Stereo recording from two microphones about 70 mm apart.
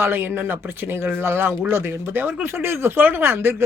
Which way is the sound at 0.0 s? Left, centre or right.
Right.